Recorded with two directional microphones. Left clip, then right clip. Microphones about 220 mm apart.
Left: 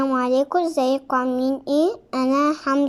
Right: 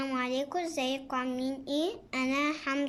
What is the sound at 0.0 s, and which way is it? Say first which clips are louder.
A woman's voice: left 12 dB; 20° left (ahead or behind).